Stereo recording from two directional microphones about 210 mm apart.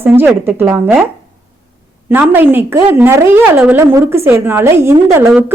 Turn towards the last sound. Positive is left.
turn(degrees=-10)  # may be behind; listen again after turning